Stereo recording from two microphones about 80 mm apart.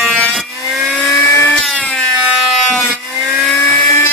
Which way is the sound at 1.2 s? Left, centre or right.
Left.